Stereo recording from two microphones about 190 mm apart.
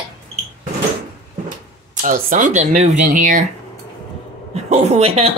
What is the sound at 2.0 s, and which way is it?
Speech, 45° right (ahead or behind).